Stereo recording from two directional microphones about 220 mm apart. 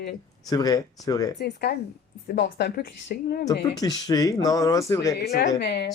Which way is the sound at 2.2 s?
50° left (ahead or behind).